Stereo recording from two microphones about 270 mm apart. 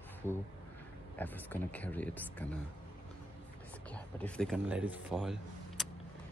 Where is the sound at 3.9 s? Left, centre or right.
Centre.